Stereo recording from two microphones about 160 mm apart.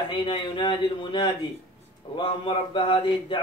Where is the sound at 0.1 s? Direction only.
30° left (ahead or behind).